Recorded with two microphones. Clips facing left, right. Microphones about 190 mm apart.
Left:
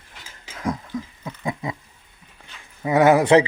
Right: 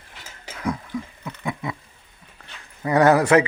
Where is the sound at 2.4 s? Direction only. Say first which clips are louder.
Even; 10° left (ahead or behind).